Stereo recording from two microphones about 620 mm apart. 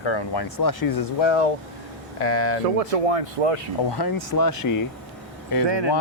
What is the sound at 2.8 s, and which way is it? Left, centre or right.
Speech, right.